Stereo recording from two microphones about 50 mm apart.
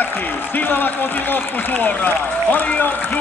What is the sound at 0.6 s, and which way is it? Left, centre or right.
A man's voice, left.